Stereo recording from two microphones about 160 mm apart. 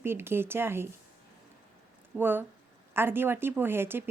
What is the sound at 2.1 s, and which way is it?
Speech, 10° right (ahead or behind).